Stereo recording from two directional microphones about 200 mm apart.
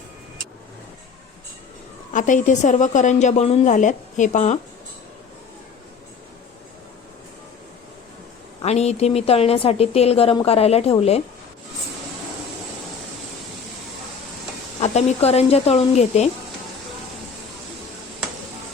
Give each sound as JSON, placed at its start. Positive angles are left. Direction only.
{"t": 2.1, "sound": "a woman's voice", "side_deg": 40}
{"t": 8.6, "sound": "a woman's voice", "side_deg": 30}
{"t": 14.8, "sound": "a woman's voice", "side_deg": 30}